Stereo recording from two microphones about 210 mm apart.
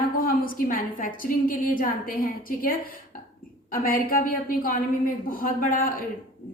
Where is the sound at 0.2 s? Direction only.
40° left (ahead or behind).